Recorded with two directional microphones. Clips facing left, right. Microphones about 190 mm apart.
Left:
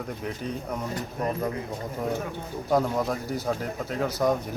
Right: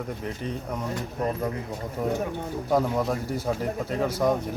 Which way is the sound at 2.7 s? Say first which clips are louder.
Even; centre (ahead or behind).